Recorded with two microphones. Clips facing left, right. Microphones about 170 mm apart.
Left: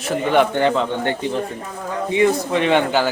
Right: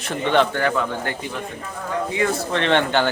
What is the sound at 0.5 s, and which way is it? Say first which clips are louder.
Speech: left 4 dB; 25° left (ahead or behind).